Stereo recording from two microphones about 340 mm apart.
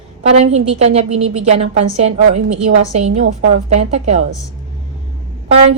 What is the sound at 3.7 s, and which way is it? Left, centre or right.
Speech, centre.